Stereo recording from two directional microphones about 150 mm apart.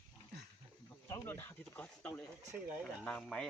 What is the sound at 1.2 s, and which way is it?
Speech, 15° left (ahead or behind).